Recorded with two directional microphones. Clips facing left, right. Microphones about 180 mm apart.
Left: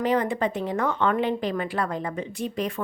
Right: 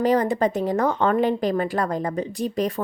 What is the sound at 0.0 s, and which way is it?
A woman's voice, 40° right (ahead or behind).